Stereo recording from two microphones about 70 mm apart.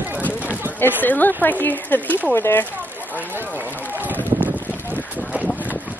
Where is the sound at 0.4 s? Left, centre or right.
Right.